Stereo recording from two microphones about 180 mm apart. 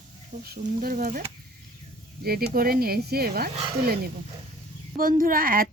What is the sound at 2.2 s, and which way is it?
A woman's voice, 55° right (ahead or behind).